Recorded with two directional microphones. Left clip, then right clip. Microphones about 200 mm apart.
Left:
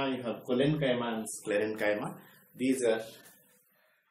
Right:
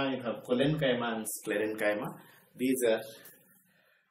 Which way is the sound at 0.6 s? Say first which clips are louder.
Left 1 dB; 10° left (ahead or behind).